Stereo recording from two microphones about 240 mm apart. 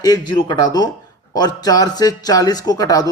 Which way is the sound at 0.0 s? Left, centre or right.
Centre.